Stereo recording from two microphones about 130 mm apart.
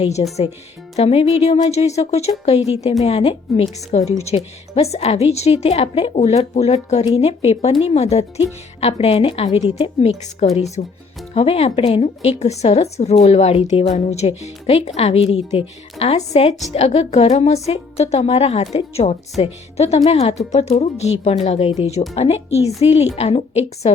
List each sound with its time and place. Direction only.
0.0 s a woman's voice: 55° left (ahead or behind)
3.9 s a woman's voice: 60° left (ahead or behind)
4.3 s a woman's voice: 45° left (ahead or behind)